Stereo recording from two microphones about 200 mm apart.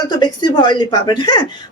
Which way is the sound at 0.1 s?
20° left (ahead or behind).